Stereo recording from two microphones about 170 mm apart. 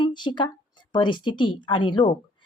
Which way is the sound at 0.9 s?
30° left (ahead or behind).